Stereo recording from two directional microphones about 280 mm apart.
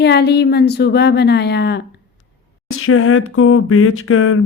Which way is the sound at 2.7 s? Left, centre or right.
Left.